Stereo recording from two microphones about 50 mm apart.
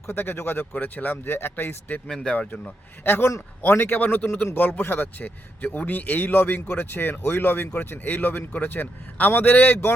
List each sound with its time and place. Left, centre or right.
0.1 s speech: left
2.0 s speech: centre
3.0 s a man's voice: left